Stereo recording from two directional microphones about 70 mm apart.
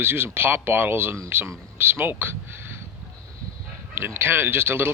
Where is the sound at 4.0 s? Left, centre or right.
Right.